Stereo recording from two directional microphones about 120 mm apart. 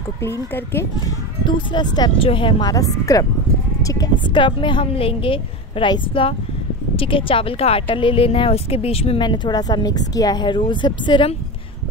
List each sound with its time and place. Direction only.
0.2 s speech: 20° left (ahead or behind)
1.0 s speech: 40° left (ahead or behind)
2.1 s a woman's voice: 50° left (ahead or behind)
2.6 s a woman's voice: 30° left (ahead or behind); by 9.2 s 55° left (ahead or behind)
9.2 s speech: 40° left (ahead or behind)